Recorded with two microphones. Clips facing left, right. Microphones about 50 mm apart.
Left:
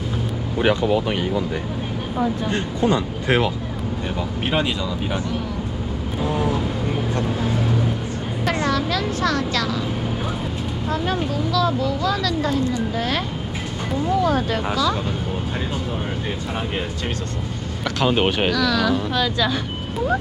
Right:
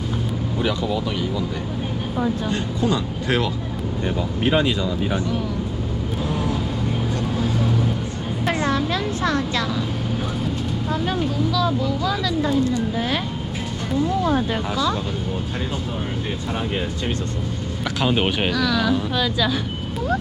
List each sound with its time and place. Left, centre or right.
0.6 s speech: left
2.5 s speech: left
6.2 s speech: centre
8.6 s speech: right
10.8 s speech: centre
14.3 s speech: centre
18.0 s speech: centre